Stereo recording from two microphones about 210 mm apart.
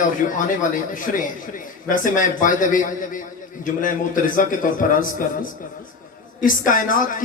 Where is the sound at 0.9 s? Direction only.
40° left (ahead or behind).